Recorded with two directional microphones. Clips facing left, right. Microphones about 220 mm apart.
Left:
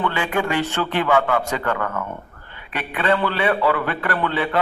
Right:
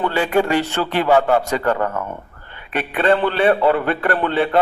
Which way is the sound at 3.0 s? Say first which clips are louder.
Right 4 dB; 30° right (ahead or behind).